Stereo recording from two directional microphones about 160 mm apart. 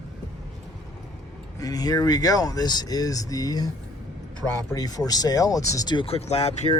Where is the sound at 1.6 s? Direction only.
25° left (ahead or behind).